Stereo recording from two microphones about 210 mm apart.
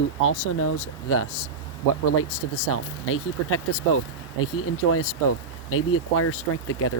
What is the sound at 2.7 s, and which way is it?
Speech, 90° left.